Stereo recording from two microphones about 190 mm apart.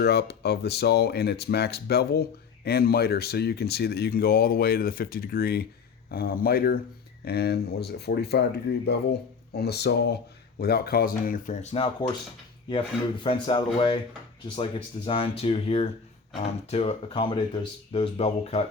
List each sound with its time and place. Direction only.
0.0 s speech: 60° left (ahead or behind)
9.5 s speech: 55° left (ahead or behind); by 18.6 s 30° left (ahead or behind)